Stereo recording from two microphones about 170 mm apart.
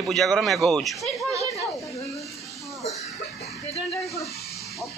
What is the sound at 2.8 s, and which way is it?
Cough, 40° left (ahead or behind).